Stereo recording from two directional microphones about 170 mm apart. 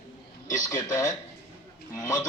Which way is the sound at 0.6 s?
20° left (ahead or behind).